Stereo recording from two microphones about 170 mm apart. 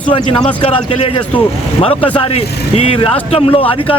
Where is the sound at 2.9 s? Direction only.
35° left (ahead or behind).